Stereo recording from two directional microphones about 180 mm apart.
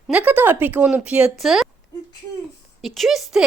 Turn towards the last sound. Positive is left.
turn(degrees=0)  # may be behind; listen again after turning